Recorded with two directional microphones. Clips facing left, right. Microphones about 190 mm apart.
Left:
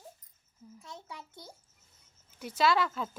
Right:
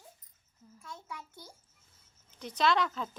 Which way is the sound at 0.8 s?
25° left (ahead or behind).